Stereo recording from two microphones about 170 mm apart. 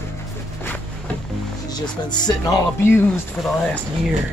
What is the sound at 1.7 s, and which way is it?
Speech, 25° left (ahead or behind).